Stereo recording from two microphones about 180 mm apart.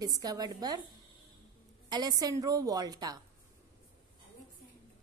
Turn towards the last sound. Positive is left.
turn(degrees=-20)  # may be behind; listen again after turning